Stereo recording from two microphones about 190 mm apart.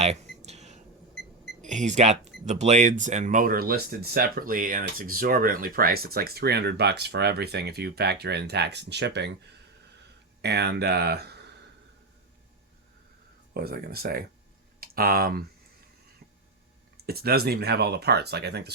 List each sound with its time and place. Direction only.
0.0 s a sound: 35° right (ahead or behind)
1.6 s speech: 40° right (ahead or behind); by 9.3 s 65° right (ahead or behind)
10.4 s speech: 60° right (ahead or behind)
13.5 s speech: 55° right (ahead or behind)
17.1 s speech: 55° right (ahead or behind)